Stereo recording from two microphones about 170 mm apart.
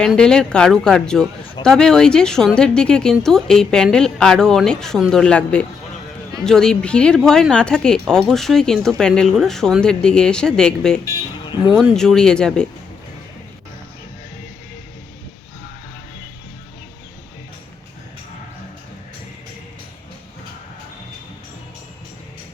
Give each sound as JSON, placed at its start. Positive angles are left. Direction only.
{"t": 0.0, "sound": "speech", "side_deg": 5}
{"t": 11.0, "sound": "speech", "side_deg": 25}
{"t": 11.8, "sound": "speech", "side_deg": 0}